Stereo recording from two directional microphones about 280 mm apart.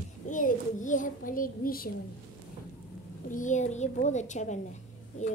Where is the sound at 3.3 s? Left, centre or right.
Left.